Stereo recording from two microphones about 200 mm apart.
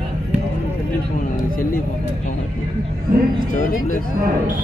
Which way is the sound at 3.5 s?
40° left (ahead or behind).